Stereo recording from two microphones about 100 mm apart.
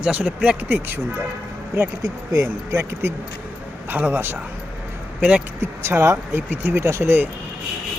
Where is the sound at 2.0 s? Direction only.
35° right (ahead or behind).